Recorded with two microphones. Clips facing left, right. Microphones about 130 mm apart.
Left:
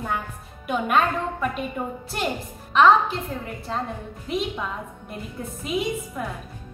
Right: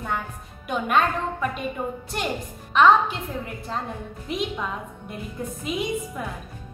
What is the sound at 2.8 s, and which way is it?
A woman's voice, centre (ahead or behind).